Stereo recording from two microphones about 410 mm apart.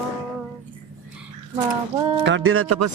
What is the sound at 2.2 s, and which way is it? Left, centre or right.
Speech, right.